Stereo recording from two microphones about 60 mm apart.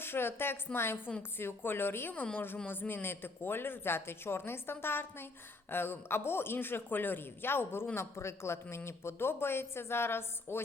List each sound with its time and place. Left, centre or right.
0.0 s a man's voice: left